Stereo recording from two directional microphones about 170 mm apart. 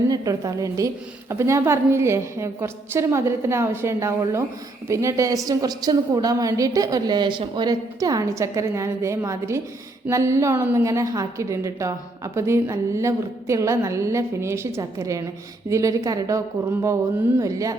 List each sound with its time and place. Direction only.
0.1 s a woman's voice: 20° right (ahead or behind)
17.4 s a woman's voice: 20° right (ahead or behind)